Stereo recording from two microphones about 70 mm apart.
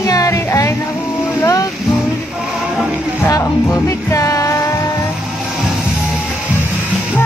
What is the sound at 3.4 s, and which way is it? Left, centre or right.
Music, left.